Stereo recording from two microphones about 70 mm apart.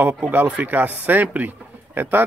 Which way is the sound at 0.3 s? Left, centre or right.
Right.